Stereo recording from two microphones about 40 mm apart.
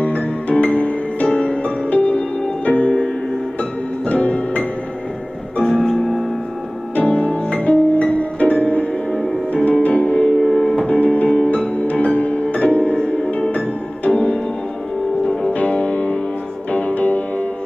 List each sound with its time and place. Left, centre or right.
0.1 s music: left
4.1 s music: left
5.7 s music: centre
7.0 s music: left
9.8 s music: left
10.1 s music: left
10.4 s music: centre
10.9 s music: left
14.0 s music: left
15.5 s music: left